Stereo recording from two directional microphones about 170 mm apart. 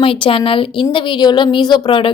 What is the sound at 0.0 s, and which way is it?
Speech, 30° left (ahead or behind).